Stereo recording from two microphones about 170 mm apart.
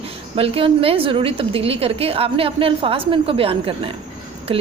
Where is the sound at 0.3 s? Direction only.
35° right (ahead or behind).